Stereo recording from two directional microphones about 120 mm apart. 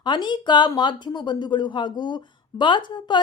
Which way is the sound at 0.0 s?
40° left (ahead or behind).